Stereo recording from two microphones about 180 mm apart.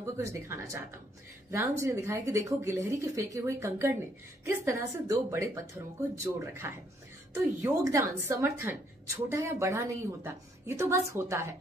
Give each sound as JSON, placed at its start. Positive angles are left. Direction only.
{"t": 0.0, "sound": "a woman's voice", "side_deg": -15}